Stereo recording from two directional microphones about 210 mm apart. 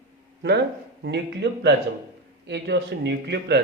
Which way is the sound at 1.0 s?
55° right (ahead or behind).